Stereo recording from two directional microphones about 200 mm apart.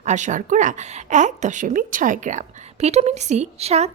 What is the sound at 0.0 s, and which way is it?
Speech, 35° right (ahead or behind).